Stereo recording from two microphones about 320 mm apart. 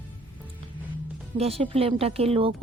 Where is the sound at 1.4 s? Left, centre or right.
Centre.